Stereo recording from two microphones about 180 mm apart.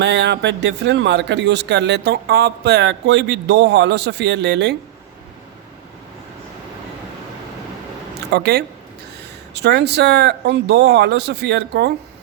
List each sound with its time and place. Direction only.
0.0 s speech: 70° right (ahead or behind)
8.3 s speech: 60° right (ahead or behind)